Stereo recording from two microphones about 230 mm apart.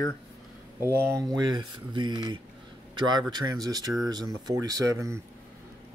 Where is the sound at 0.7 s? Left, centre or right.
Centre.